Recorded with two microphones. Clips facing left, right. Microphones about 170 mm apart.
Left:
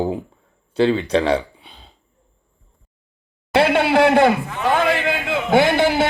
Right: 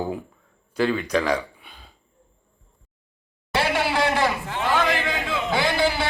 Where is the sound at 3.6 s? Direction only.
60° left (ahead or behind).